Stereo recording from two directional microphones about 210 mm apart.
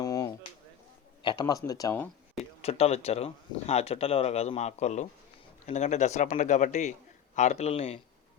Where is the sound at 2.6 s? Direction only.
30° left (ahead or behind).